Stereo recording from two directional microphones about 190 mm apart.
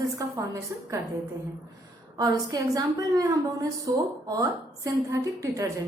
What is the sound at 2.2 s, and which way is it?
A woman's voice, 20° right (ahead or behind).